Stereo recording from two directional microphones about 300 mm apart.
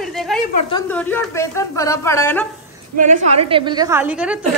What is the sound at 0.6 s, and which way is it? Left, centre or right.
Speech, centre.